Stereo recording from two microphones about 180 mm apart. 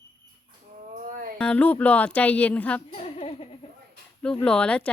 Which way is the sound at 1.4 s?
5° left (ahead or behind).